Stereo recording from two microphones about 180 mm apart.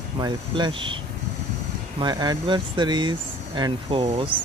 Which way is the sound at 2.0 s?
20° right (ahead or behind).